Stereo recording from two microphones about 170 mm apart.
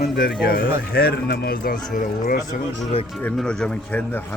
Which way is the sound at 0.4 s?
65° left (ahead or behind).